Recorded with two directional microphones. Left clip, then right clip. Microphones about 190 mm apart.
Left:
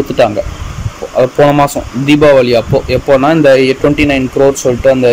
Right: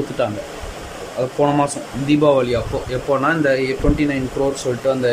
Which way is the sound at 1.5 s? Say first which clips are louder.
Left 9 dB; 15° left (ahead or behind).